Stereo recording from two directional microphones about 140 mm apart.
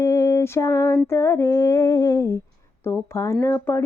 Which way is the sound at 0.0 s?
20° left (ahead or behind).